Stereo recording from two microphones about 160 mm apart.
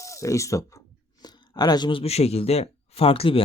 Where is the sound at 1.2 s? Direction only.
25° left (ahead or behind).